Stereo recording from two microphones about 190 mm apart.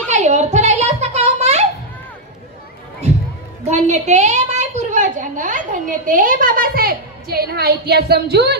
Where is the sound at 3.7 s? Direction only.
35° right (ahead or behind); by 8.5 s 60° right (ahead or behind).